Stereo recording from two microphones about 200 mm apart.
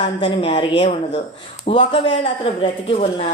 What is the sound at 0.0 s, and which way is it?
A woman's voice, 25° left (ahead or behind).